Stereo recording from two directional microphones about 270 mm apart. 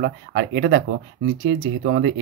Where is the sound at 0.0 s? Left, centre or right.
Right.